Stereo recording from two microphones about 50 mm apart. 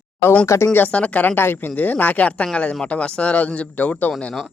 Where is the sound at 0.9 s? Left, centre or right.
Left.